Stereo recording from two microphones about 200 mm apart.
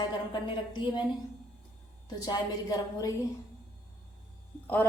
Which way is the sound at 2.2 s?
20° left (ahead or behind).